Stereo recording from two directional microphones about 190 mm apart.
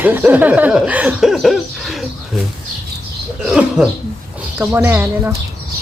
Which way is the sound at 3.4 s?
5° right (ahead or behind).